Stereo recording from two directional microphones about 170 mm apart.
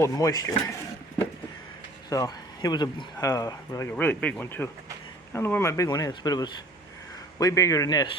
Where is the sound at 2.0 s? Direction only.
20° left (ahead or behind).